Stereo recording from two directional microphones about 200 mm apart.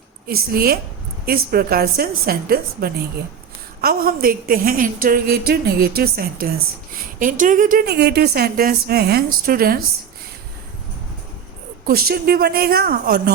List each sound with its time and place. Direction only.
0.3 s a woman's voice: 50° right (ahead or behind)
11.9 s a woman's voice: 50° right (ahead or behind)